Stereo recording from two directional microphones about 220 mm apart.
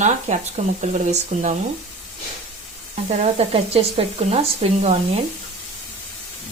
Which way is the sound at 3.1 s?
30° right (ahead or behind).